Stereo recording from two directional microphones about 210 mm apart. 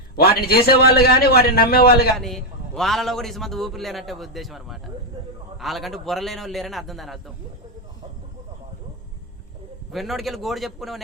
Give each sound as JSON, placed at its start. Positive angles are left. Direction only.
{"t": 0.2, "sound": "a man's voice", "side_deg": 50}
{"t": 2.1, "sound": "a man's voice", "side_deg": 0}
{"t": 9.9, "sound": "a man's voice", "side_deg": 0}